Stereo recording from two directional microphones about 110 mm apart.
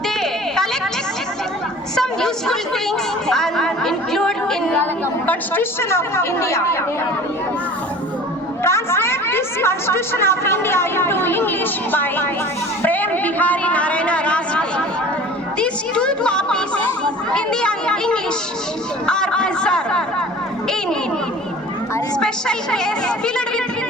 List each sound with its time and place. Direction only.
0.2 s a sound: 5° left (ahead or behind)
2.0 s a sound: 5° left (ahead or behind)
3.2 s chatter: 5° left (ahead or behind)
4.8 s a woman's voice: 15° left (ahead or behind)
8.6 s a woman's voice: 25° left (ahead or behind)
12.8 s a sound: 15° left (ahead or behind)
15.5 s chatter: 10° left (ahead or behind)
17.3 s speech: 10° left (ahead or behind)
22.2 s speech: 5° left (ahead or behind)